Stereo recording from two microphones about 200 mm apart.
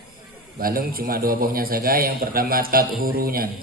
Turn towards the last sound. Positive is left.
turn(degrees=-50)  # may be behind; listen again after turning